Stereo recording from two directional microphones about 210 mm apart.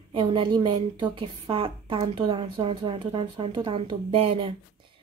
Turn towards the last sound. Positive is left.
turn(degrees=-25)  # may be behind; listen again after turning